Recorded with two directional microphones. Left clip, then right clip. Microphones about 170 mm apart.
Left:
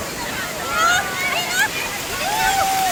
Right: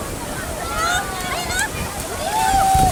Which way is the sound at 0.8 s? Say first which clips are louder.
Left 4 dB; 35° left (ahead or behind).